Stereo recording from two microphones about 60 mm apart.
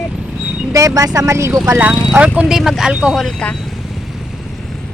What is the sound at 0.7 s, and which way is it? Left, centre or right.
Speech, right.